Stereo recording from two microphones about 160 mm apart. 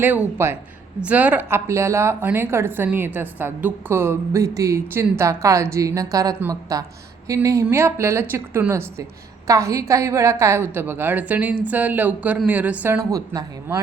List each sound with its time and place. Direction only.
0.0 s speech: 10° right (ahead or behind)